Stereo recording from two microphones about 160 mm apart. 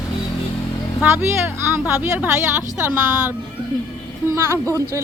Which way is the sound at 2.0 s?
10° right (ahead or behind).